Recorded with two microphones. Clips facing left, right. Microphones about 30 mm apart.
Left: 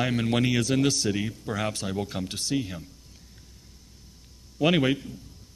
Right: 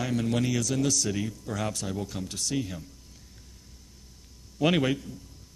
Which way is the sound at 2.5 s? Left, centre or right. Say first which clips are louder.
Left 3 dB; centre.